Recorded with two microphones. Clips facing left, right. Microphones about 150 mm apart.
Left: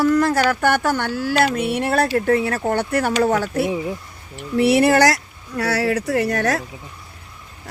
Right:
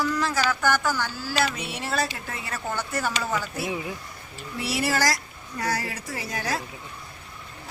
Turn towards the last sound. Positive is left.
turn(degrees=65)  # may be behind; listen again after turning